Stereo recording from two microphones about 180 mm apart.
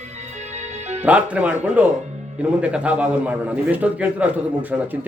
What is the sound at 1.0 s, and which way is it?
A man's voice, 5° right (ahead or behind).